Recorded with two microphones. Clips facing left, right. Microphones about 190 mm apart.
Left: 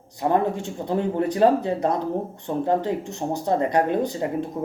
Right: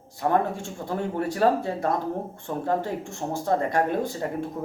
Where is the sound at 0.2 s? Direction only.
20° left (ahead or behind).